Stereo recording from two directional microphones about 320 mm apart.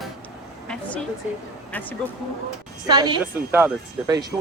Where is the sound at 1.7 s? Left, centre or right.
Centre.